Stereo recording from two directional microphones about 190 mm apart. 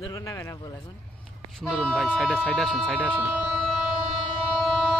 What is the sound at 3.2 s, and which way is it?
Speech, 5° right (ahead or behind).